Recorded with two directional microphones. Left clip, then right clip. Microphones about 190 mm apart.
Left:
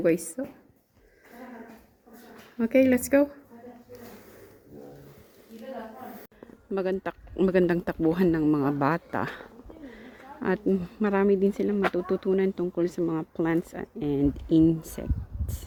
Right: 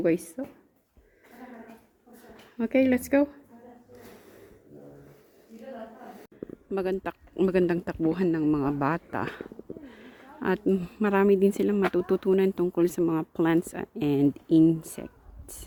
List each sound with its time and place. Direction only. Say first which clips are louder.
0.0 s speech: left 1 dB; 10° right (ahead or behind)
2.6 s speech: left 2 dB; 5° right (ahead or behind)
6.7 s speech: left 1 dB; 10° right (ahead or behind)
14.4 s speech: even; 10° right (ahead or behind)
15.0 s a sound: left 5 dB; 10° right (ahead or behind)